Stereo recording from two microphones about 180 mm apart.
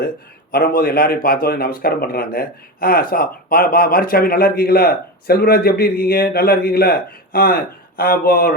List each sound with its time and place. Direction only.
0.5 s a man's voice: 55° left (ahead or behind)